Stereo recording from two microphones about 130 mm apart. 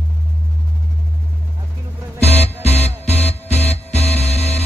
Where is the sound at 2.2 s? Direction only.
55° left (ahead or behind).